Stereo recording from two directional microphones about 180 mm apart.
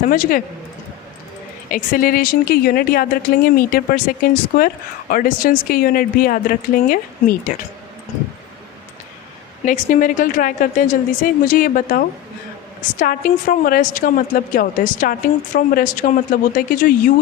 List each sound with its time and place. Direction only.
0.1 s a woman's voice: 50° left (ahead or behind)
1.7 s a woman's voice: 50° left (ahead or behind)
9.6 s a woman's voice: 45° left (ahead or behind)